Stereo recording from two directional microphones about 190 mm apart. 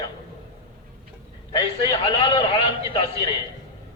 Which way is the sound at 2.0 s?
25° left (ahead or behind).